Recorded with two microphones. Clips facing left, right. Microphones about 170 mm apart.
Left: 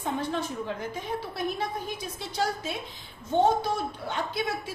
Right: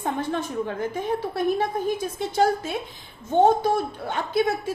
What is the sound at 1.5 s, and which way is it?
Speech, 50° right (ahead or behind).